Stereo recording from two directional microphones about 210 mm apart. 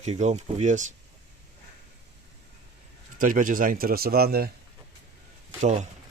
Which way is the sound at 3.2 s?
40° right (ahead or behind).